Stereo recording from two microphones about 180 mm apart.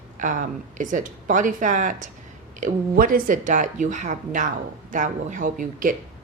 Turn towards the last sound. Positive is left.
turn(degrees=-50)  # may be behind; listen again after turning